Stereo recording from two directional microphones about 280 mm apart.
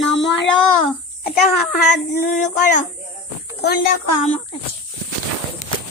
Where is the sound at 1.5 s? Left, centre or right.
Left.